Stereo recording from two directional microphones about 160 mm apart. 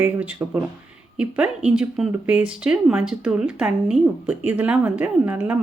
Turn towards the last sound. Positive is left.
turn(degrees=-10)  # may be behind; listen again after turning